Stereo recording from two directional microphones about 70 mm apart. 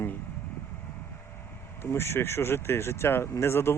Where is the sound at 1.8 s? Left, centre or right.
Left.